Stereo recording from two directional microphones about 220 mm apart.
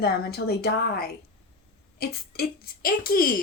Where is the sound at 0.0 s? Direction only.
45° left (ahead or behind).